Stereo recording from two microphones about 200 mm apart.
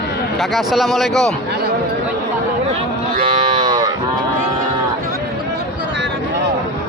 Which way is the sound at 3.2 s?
25° right (ahead or behind).